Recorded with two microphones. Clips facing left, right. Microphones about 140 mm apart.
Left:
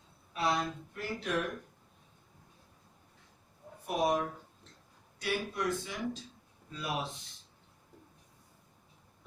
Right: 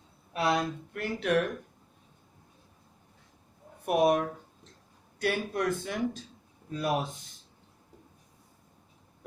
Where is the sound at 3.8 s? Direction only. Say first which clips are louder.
Right 6 dB; 60° right (ahead or behind).